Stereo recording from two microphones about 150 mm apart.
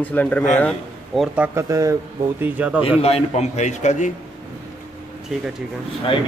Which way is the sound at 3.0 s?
45° left (ahead or behind).